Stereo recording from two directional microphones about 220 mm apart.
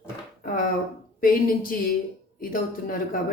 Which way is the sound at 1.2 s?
40° left (ahead or behind).